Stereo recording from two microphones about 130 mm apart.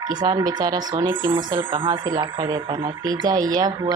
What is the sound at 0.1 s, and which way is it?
Speech, 35° right (ahead or behind).